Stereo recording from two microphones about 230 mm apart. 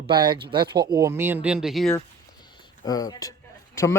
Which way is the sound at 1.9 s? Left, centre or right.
Centre.